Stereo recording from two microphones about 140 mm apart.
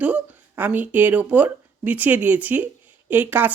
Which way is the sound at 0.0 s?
10° right (ahead or behind).